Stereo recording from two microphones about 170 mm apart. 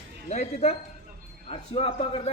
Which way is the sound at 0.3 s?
40° left (ahead or behind).